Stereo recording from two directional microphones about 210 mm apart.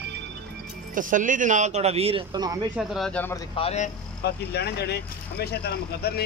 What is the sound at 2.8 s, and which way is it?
Speech, centre (ahead or behind).